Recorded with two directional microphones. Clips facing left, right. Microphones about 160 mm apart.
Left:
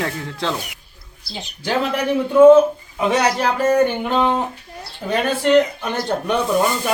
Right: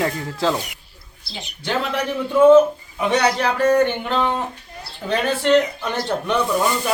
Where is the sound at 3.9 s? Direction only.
10° left (ahead or behind).